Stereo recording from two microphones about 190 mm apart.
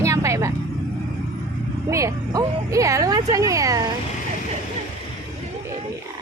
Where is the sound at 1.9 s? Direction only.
15° right (ahead or behind).